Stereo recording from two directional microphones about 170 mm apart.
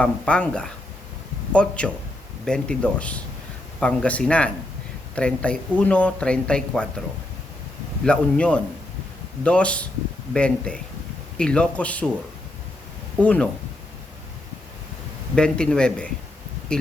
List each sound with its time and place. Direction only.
0.0 s speech: 5° left (ahead or behind)
8.0 s speech: 5° left (ahead or behind)
13.1 s speech: 10° left (ahead or behind)
15.4 s speech: 5° left (ahead or behind)